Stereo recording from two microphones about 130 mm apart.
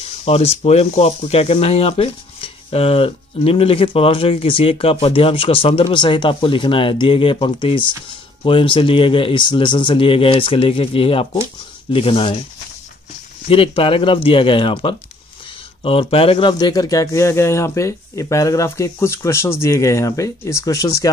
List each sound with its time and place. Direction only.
0.2 s speech: 50° left (ahead or behind)
13.5 s speech: 45° left (ahead or behind); by 21.1 s 25° left (ahead or behind)